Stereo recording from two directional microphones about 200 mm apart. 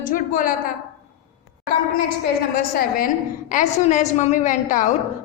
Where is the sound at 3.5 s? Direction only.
40° left (ahead or behind).